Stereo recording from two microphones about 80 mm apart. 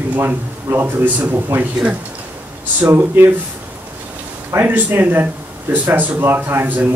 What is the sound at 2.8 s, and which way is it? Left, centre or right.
Speech, right.